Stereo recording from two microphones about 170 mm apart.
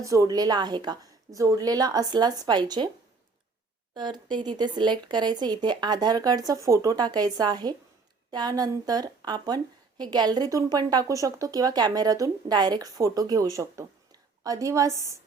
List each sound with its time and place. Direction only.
0.0 s a woman's voice: 20° right (ahead or behind)
3.9 s a woman's voice: 25° right (ahead or behind)